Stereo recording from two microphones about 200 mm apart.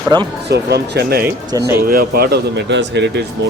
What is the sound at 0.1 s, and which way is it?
Speech, 20° right (ahead or behind).